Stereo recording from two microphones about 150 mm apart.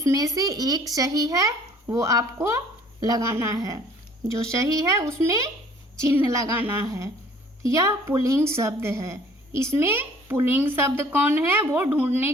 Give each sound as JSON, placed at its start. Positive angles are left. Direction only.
{"t": 0.0, "sound": "a woman's voice", "side_deg": -20}